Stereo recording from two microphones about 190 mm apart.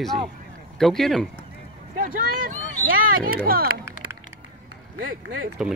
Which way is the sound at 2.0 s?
50° right (ahead or behind).